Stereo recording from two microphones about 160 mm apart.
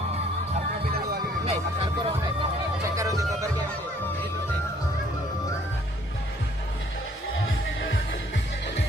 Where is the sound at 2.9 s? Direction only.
20° right (ahead or behind).